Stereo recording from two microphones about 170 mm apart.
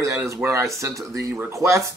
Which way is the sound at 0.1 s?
15° right (ahead or behind).